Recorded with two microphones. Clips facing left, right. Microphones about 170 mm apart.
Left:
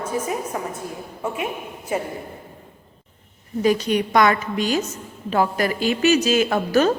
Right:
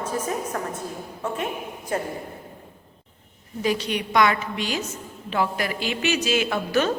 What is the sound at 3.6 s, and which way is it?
A woman's voice, 45° left (ahead or behind).